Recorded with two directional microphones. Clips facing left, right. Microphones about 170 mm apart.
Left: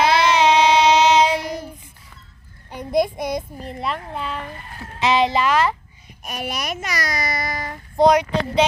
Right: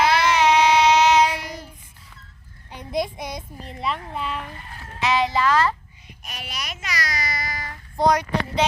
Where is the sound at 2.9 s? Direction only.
50° left (ahead or behind).